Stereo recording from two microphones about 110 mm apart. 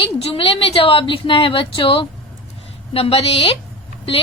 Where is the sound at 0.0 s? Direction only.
55° left (ahead or behind).